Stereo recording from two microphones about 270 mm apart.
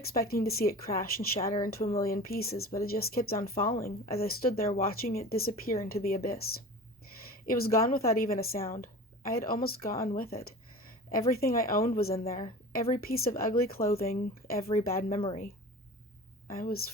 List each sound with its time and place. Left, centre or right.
0.0 s speech: left
7.4 s speech: left
16.5 s speech: left